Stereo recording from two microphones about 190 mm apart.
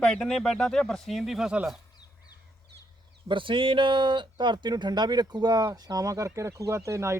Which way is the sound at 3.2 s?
25° right (ahead or behind).